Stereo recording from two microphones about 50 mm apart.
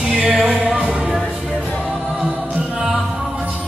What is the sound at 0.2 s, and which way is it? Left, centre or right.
Music, centre.